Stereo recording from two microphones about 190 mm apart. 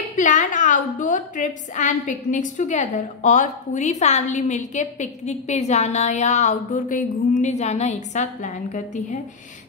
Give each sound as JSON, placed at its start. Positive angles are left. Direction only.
{"t": 0.1, "sound": "a woman's voice", "side_deg": 40}